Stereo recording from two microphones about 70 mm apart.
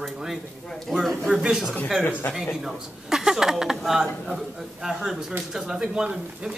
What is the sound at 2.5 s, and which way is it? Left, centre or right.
Speech, centre.